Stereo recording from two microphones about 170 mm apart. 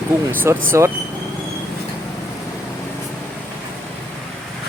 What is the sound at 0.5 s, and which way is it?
Speech, 15° right (ahead or behind).